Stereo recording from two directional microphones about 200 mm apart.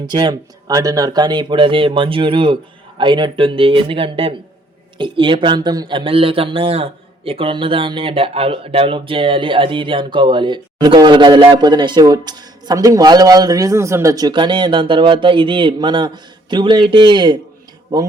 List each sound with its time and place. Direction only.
0.0 s speech: 20° right (ahead or behind)